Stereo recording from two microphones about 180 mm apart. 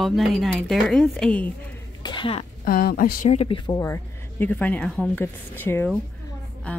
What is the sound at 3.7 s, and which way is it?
A woman's voice, 15° left (ahead or behind).